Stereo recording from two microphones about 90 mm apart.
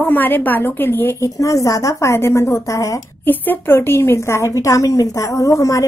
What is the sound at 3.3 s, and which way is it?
A woman's voice, 20° left (ahead or behind).